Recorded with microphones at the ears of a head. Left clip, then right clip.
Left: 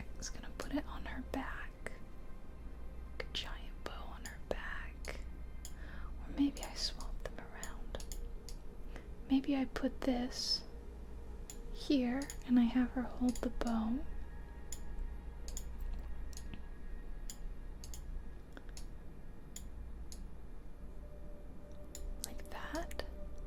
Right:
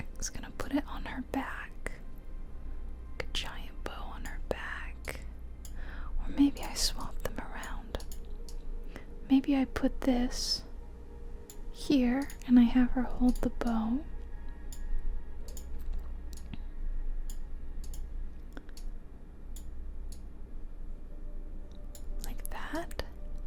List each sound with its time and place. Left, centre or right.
0.2 s whispering: right
3.2 s whispering: right
8.9 s a sound: right
11.9 s speech: right